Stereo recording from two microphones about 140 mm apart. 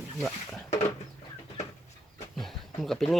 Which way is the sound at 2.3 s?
Centre (ahead or behind).